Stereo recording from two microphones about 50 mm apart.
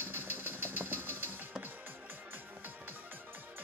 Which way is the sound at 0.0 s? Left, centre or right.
Right.